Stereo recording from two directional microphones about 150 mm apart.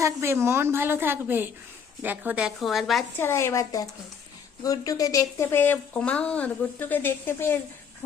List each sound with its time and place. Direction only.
0.0 s a woman's voice: 15° right (ahead or behind); by 3.0 s centre (ahead or behind)
3.2 s a woman's voice: 15° left (ahead or behind)